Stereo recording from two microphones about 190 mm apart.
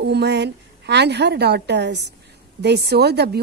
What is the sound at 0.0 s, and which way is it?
A woman's voice, 60° right (ahead or behind).